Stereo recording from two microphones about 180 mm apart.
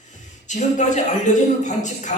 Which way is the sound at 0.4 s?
40° left (ahead or behind).